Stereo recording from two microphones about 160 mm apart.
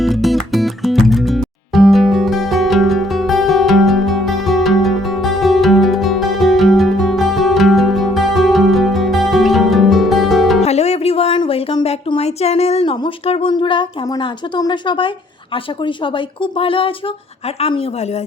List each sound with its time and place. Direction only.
0.0 s music: centre (ahead or behind)
10.6 s music: 40° left (ahead or behind)
15.5 s speech: 30° left (ahead or behind)